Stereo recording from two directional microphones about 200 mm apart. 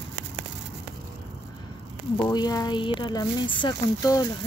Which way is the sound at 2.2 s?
20° left (ahead or behind).